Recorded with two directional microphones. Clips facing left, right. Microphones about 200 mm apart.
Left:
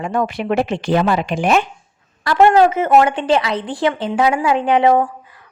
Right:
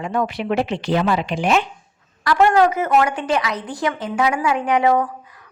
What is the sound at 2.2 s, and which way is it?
Speech, 25° left (ahead or behind).